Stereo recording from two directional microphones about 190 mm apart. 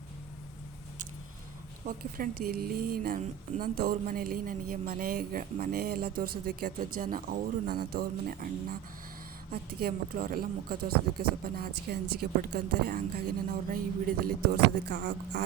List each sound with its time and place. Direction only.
1.9 s speech: 50° right (ahead or behind)